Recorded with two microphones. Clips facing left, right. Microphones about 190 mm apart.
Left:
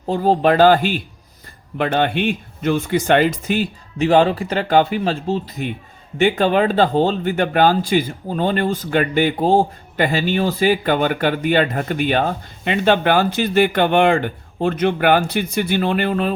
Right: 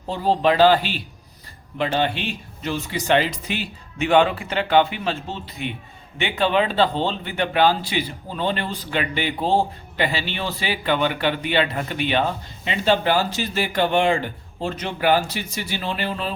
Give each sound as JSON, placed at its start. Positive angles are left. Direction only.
{"t": 0.1, "sound": "speech", "side_deg": 50}